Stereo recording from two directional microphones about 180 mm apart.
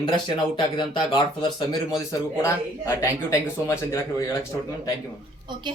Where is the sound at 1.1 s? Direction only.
25° left (ahead or behind).